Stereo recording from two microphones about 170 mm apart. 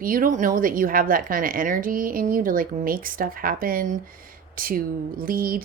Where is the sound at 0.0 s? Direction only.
55° right (ahead or behind).